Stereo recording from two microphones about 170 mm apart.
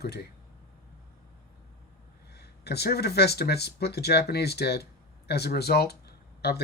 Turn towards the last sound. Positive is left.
turn(degrees=70)  # may be behind; listen again after turning